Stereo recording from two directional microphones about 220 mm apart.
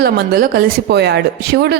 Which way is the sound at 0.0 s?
45° right (ahead or behind).